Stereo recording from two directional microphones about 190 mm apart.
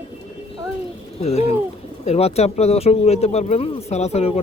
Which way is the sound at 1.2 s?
35° left (ahead or behind).